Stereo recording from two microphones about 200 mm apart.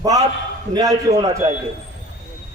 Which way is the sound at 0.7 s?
20° right (ahead or behind).